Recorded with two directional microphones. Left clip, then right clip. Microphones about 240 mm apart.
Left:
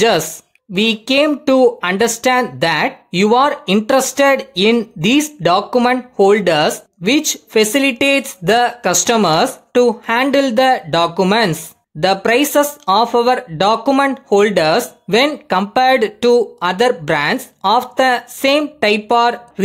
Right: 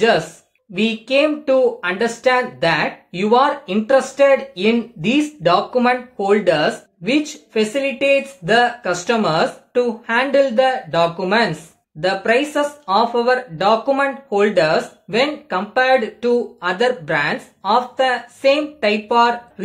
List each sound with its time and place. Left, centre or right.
0.7 s speech: left